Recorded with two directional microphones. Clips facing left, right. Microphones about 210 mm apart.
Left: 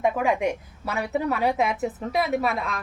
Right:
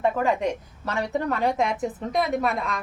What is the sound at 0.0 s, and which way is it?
A woman's voice, 10° left (ahead or behind).